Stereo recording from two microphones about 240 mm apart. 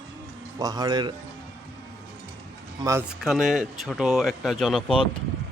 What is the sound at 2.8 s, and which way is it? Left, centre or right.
Speech, centre.